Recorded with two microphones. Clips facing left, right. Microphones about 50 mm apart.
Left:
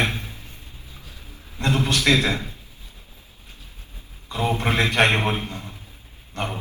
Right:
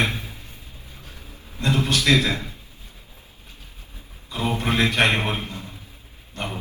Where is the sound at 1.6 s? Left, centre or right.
Left.